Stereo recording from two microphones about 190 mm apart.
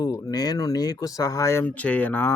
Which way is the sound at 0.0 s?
20° left (ahead or behind).